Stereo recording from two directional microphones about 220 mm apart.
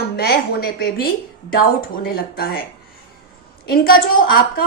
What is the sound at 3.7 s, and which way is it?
Speech, 40° left (ahead or behind).